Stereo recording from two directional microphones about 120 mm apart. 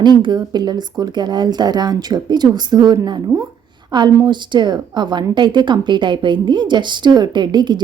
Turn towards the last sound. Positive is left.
turn(degrees=-40)  # may be behind; listen again after turning